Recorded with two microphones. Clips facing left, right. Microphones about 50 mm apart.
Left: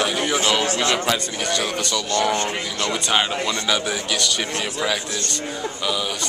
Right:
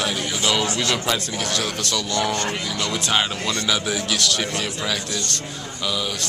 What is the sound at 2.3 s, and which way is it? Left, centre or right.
Speech, centre.